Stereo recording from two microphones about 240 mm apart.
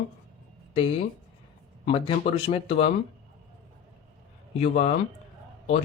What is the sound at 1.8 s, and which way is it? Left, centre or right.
A man's voice, left.